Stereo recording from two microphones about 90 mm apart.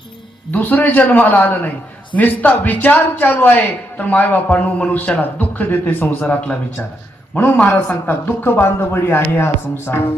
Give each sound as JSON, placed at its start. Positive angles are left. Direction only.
{"t": 0.5, "sound": "speech", "side_deg": 20}
{"t": 7.9, "sound": "speech", "side_deg": 20}